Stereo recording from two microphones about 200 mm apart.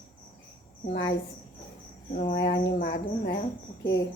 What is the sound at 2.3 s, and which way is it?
Speech, 60° left (ahead or behind).